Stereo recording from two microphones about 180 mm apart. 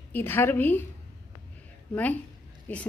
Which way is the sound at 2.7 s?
10° left (ahead or behind).